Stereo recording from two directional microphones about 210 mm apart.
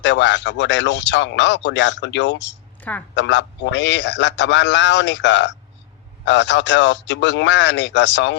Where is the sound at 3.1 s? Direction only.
60° left (ahead or behind).